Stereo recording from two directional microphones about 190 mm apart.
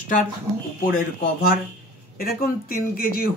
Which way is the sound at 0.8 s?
45° left (ahead or behind).